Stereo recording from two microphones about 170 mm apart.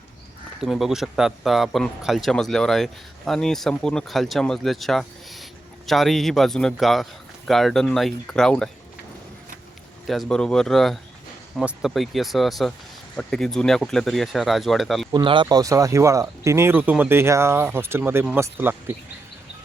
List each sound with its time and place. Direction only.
0.6 s speech: centre (ahead or behind)
10.1 s speech: centre (ahead or behind)
15.1 s speech: 30° right (ahead or behind); by 18.9 s 10° right (ahead or behind)